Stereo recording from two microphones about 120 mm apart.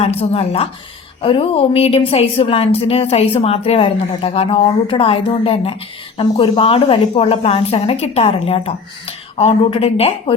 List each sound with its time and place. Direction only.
0.0 s a woman's voice: 55° left (ahead or behind)